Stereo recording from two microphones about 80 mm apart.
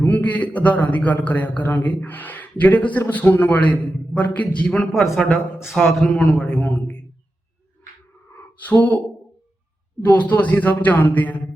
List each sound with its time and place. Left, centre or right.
0.0 s a man's voice: left
5.6 s a man's voice: centre
6.1 s a man's voice: centre
8.5 s speech: centre
10.0 s a man's voice: centre